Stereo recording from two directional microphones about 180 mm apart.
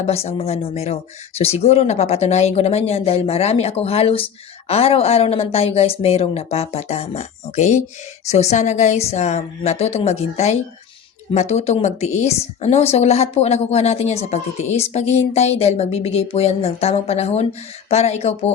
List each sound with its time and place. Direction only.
0.0 s speech: 35° left (ahead or behind)